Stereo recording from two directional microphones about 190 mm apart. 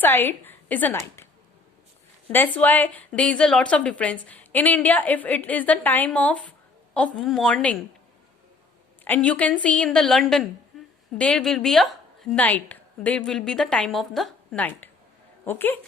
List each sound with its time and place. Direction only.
0.0 s a woman's voice: 10° left (ahead or behind)
2.3 s a woman's voice: 10° left (ahead or behind)
9.0 s a woman's voice: 5° left (ahead or behind)
10.7 s a sound: centre (ahead or behind)
11.2 s a woman's voice: 5° left (ahead or behind)